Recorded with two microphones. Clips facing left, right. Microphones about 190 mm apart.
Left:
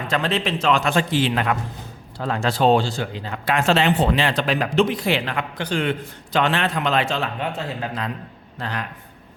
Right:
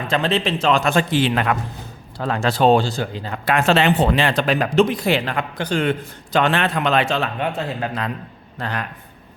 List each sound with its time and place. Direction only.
0.1 s a man's voice: 25° right (ahead or behind); by 8.9 s 55° right (ahead or behind)